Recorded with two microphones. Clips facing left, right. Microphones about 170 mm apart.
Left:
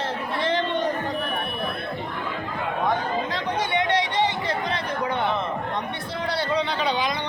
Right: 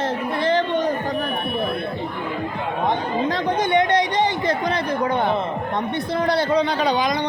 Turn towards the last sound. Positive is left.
turn(degrees=-45)  # may be behind; listen again after turning